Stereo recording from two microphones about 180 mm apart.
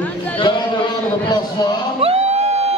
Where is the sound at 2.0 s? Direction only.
35° right (ahead or behind).